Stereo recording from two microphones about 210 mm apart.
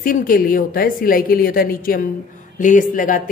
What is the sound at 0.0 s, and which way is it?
A woman's voice, 40° left (ahead or behind).